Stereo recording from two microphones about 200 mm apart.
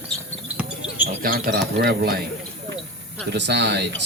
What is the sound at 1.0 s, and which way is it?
A man's voice, 45° right (ahead or behind).